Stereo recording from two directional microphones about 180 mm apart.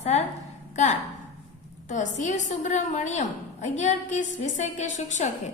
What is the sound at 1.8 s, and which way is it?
A woman's voice, 45° left (ahead or behind).